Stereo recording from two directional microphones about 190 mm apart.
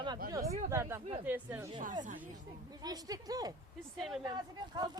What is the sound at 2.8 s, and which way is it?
Speech, 20° right (ahead or behind).